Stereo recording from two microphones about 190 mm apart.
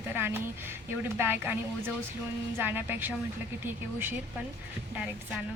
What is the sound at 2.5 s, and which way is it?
Speech, 10° right (ahead or behind).